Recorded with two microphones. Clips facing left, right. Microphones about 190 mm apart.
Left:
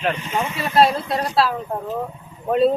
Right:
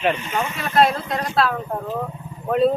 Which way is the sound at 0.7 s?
30° left (ahead or behind).